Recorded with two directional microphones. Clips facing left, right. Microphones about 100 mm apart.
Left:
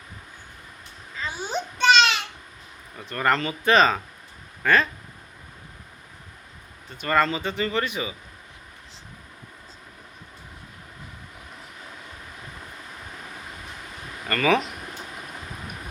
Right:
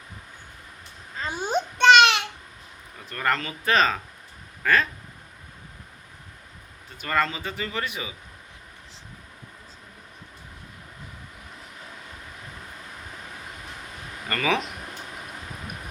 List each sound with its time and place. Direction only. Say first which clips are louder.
1.2 s babbling: right 3 dB; 50° right (ahead or behind)
3.1 s speech: left 3 dB; centre (ahead or behind)
7.1 s speech: left 3 dB; centre (ahead or behind)
14.3 s speech: left 4 dB; 10° right (ahead or behind)